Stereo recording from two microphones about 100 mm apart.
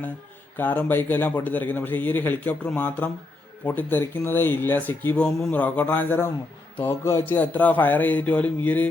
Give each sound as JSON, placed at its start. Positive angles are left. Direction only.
{"t": 0.5, "sound": "speech", "side_deg": 20}